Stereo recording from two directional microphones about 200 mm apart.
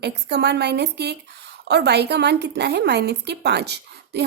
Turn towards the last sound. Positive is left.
turn(degrees=-55)  # may be behind; listen again after turning